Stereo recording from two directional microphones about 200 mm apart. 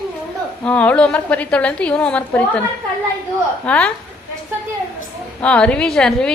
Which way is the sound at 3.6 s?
5° left (ahead or behind).